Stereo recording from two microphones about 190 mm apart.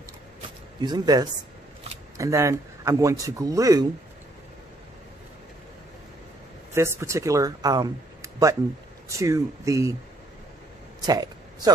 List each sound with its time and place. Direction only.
0.7 s speech: 20° right (ahead or behind)
6.7 s speech: 15° right (ahead or behind)
11.0 s a sound: 20° right (ahead or behind)